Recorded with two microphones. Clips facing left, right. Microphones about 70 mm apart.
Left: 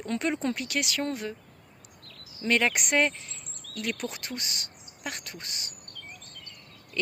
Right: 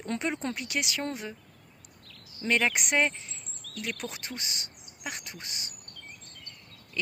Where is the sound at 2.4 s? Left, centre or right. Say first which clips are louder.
Left 1 dB; centre.